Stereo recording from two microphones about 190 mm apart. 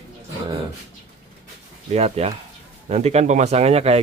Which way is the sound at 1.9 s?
35° right (ahead or behind).